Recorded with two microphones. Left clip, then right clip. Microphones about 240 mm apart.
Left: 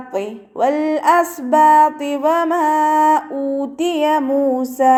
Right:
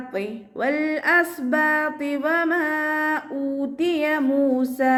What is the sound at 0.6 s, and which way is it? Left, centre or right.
A woman's voice, left.